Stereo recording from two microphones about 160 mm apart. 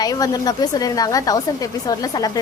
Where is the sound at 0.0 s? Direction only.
25° left (ahead or behind).